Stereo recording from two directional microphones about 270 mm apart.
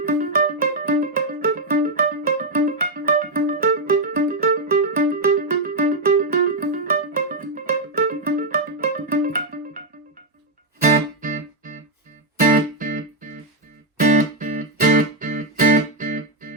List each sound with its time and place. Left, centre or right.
0.2 s music: right
11.2 s music: right